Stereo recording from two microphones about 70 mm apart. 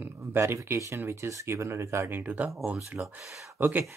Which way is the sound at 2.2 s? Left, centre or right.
Right.